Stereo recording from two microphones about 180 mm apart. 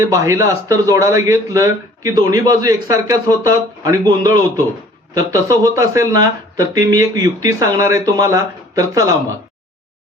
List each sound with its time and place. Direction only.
0.0 s a man's voice: 15° right (ahead or behind)